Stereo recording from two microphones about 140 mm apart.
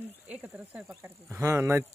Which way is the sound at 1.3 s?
20° right (ahead or behind).